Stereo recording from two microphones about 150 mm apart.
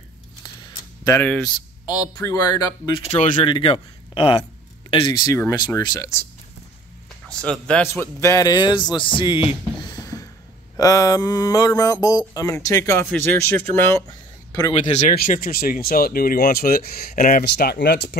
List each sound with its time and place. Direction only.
0.7 s a sound: 25° left (ahead or behind)
1.9 s speech: 25° left (ahead or behind)
3.0 s speech: 50° left (ahead or behind)
3.4 s a man's voice: 35° left (ahead or behind)
7.2 s speech: 5° left (ahead or behind)
7.9 s music: 20° left (ahead or behind)
10.8 s speech: 25° left (ahead or behind)
14.7 s speech: 45° left (ahead or behind)
15.1 s speech: 65° left (ahead or behind); by 18.1 s 90° left